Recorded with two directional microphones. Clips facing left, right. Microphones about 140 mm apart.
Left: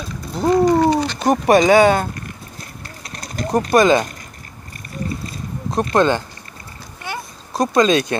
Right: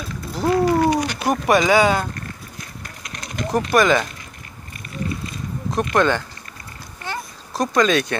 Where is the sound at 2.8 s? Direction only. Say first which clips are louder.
Left 1 dB; 35° left (ahead or behind).